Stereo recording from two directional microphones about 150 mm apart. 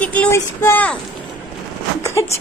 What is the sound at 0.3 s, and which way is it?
Speech, 15° left (ahead or behind).